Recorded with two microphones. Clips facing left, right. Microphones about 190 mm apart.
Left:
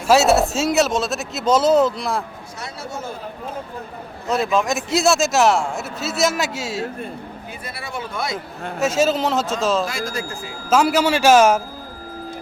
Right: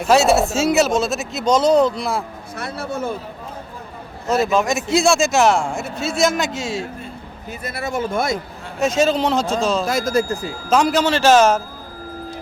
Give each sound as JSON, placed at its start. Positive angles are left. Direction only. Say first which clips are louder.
{"t": 0.1, "sound": "a man's voice", "louder": "even", "side_deg": 0}
{"t": 2.6, "sound": "speech", "louder": "right 6 dB", "side_deg": -55}
{"t": 4.3, "sound": "a man's voice", "louder": "right 2 dB", "side_deg": 0}
{"t": 7.6, "sound": "speech", "louder": "right 8 dB", "side_deg": -45}
{"t": 8.8, "sound": "a man's voice", "louder": "right 1 dB", "side_deg": 5}